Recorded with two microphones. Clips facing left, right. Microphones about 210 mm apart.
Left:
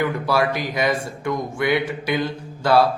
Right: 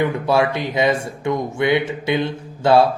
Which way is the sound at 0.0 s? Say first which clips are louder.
Right 3 dB; 25° right (ahead or behind).